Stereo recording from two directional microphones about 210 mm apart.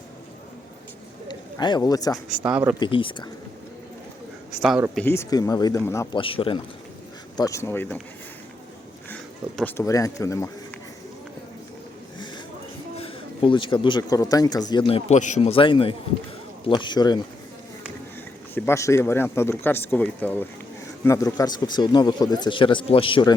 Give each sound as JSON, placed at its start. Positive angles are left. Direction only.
{"t": 1.3, "sound": "speech", "side_deg": 20}
{"t": 2.4, "sound": "speech", "side_deg": -5}
{"t": 2.8, "sound": "speech", "side_deg": 25}
{"t": 4.6, "sound": "speech", "side_deg": 0}
{"t": 5.0, "sound": "speech", "side_deg": 10}
{"t": 6.1, "sound": "speech", "side_deg": 25}
{"t": 9.6, "sound": "speech", "side_deg": 10}
{"t": 13.0, "sound": "speech", "side_deg": 25}
{"t": 18.5, "sound": "speech", "side_deg": 10}